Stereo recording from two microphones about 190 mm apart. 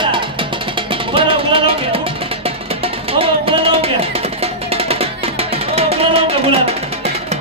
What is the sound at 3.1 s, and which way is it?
Music, 30° right (ahead or behind).